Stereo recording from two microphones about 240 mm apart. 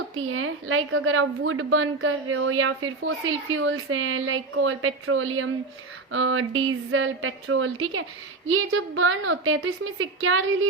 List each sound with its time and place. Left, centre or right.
0.3 s a woman's voice: right